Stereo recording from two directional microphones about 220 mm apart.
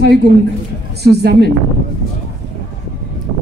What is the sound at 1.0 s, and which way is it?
Speech, 50° right (ahead or behind).